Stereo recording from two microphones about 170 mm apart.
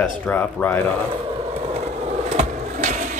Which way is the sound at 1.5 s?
40° right (ahead or behind).